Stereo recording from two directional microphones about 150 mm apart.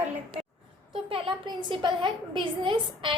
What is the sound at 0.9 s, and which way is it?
A woman's voice, 35° right (ahead or behind).